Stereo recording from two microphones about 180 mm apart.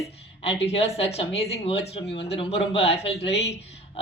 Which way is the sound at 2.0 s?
75° left (ahead or behind).